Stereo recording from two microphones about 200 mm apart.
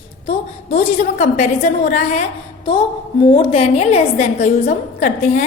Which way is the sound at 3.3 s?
30° left (ahead or behind).